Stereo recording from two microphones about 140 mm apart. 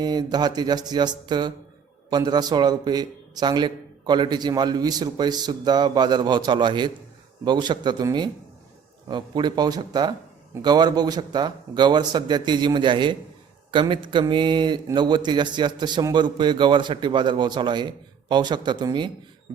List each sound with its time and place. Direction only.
0.0 s a man's voice: 30° right (ahead or behind)